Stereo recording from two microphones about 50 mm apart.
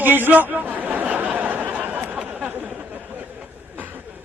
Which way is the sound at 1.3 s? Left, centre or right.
Right.